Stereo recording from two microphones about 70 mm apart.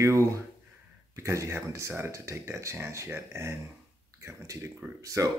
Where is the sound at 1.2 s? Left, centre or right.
Right.